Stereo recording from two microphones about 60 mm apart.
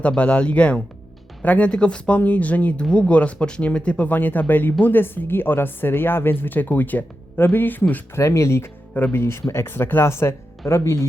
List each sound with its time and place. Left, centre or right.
0.2 s speech: left
8.1 s speech: left